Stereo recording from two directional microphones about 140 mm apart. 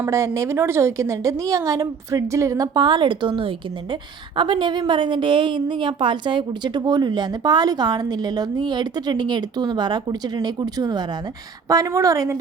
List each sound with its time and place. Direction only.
0.0 s a woman's voice: 20° right (ahead or behind)